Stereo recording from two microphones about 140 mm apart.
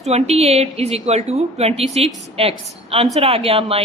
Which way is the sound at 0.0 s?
50° right (ahead or behind).